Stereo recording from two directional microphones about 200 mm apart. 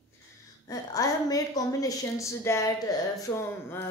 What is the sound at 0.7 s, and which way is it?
A woman's voice, 15° left (ahead or behind).